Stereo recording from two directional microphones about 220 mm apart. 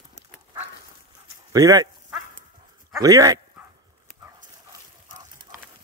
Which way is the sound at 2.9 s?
15° right (ahead or behind).